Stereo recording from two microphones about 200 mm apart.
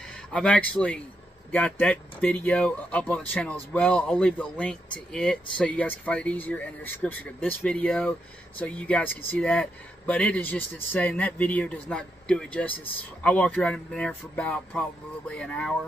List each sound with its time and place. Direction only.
0.3 s speech: 5° left (ahead or behind)